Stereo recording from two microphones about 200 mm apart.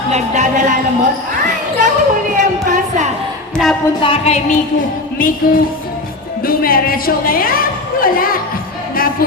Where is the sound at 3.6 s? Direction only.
Centre (ahead or behind).